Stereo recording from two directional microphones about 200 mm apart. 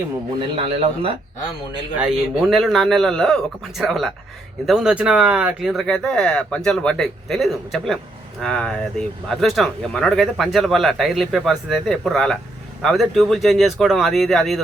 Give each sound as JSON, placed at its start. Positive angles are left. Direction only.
{"t": 0.5, "sound": "speech", "side_deg": -30}
{"t": 2.0, "sound": "speech", "side_deg": 0}